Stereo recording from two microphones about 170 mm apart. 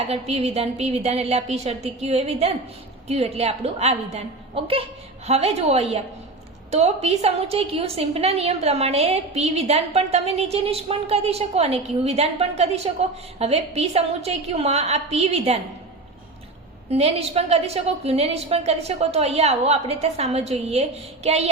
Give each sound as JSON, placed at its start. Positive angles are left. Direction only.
{"t": 0.0, "sound": "a woman's voice", "side_deg": -35}
{"t": 16.9, "sound": "a woman's voice", "side_deg": -35}